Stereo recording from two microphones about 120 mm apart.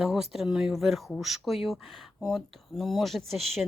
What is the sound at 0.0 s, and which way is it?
Speech, 5° right (ahead or behind).